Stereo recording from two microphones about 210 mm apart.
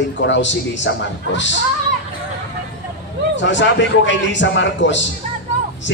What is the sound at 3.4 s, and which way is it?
A man's voice, 60° left (ahead or behind).